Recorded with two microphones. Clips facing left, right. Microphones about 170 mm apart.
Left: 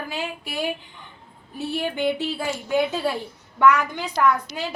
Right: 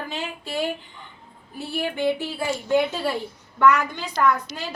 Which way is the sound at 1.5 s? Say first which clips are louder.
Left 1 dB; 20° left (ahead or behind).